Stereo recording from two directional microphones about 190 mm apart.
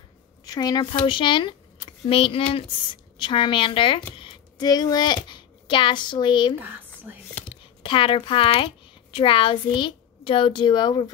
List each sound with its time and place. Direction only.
0.5 s a woman's voice: 20° left (ahead or behind)
7.1 s speech: 10° right (ahead or behind)
7.8 s a woman's voice: 25° left (ahead or behind)